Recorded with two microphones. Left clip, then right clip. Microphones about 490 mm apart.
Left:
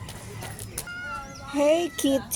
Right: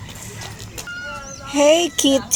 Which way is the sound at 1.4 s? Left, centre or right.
Left.